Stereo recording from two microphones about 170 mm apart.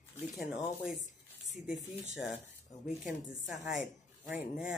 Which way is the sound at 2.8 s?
Centre (ahead or behind).